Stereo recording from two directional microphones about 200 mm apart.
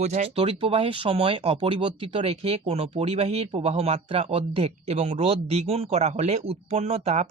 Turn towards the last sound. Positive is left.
turn(degrees=-35)  # may be behind; listen again after turning